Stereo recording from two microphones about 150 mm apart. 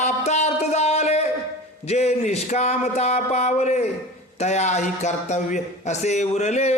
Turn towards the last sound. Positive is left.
turn(degrees=50)  # may be behind; listen again after turning